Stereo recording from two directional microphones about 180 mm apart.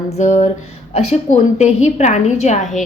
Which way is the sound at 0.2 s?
40° left (ahead or behind).